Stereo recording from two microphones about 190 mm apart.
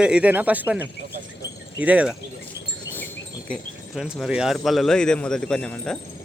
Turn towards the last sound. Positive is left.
turn(degrees=5)  # may be behind; listen again after turning